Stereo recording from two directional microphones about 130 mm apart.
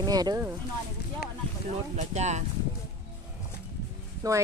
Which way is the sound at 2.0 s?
60° right (ahead or behind).